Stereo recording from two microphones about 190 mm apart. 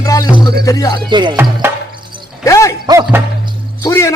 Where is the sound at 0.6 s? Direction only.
15° left (ahead or behind).